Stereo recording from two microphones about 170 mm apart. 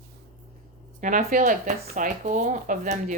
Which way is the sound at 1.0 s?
50° right (ahead or behind).